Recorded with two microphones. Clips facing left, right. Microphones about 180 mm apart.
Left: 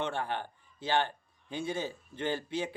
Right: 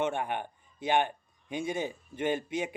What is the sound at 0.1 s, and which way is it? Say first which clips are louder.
Speech: right 2 dB; 15° right (ahead or behind).